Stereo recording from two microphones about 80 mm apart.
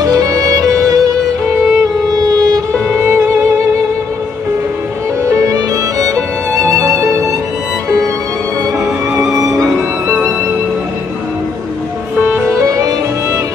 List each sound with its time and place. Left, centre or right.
0.0 s music: right
2.9 s music: right
5.2 s music: right
9.3 s music: right
12.4 s music: right